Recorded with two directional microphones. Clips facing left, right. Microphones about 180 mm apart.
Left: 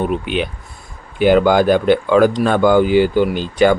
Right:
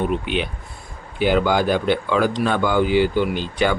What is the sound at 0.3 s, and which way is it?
Speech, 45° left (ahead or behind).